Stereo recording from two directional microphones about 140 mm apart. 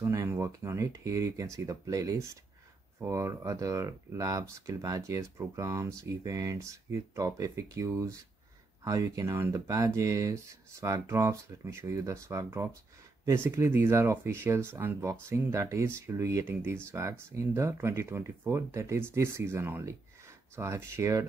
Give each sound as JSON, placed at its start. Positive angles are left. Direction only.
{"t": 0.0, "sound": "speech", "side_deg": -20}